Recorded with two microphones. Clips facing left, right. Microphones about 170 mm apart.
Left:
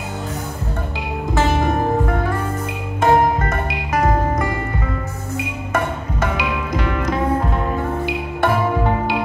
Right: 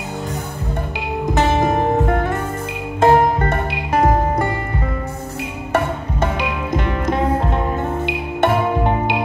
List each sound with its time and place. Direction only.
1.3 s music: 20° right (ahead or behind)
8.0 s music: 20° right (ahead or behind)